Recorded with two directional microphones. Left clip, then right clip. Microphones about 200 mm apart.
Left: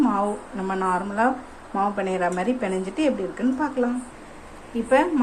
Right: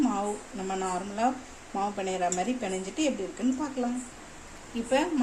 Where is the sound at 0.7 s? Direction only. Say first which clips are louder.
Left 8 dB; centre (ahead or behind).